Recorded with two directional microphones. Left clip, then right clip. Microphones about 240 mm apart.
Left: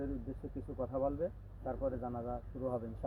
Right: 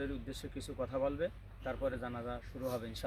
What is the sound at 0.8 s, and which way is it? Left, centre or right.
A man's voice, right.